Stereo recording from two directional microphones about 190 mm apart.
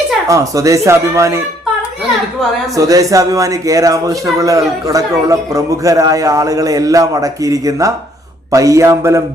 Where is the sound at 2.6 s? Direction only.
15° right (ahead or behind).